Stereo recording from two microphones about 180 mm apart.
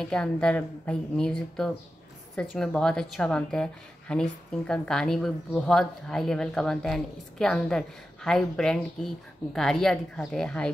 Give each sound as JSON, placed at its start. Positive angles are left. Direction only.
{"t": 0.0, "sound": "a woman's voice", "side_deg": 5}